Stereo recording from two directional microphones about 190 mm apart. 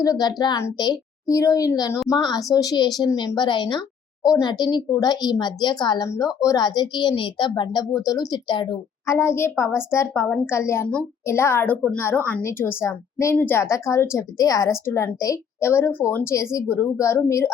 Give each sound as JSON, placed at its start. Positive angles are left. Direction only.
{"t": 0.0, "sound": "a woman's voice", "side_deg": 20}